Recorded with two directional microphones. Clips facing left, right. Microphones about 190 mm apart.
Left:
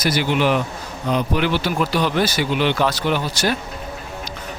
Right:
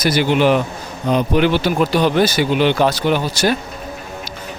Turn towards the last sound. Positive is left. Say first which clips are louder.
# right 4 dB
turn(degrees=-15)  # may be behind; listen again after turning